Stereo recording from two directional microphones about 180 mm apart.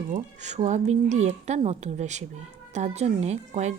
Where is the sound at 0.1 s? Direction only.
40° right (ahead or behind).